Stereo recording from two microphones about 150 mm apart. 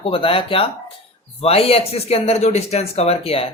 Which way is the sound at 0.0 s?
35° left (ahead or behind).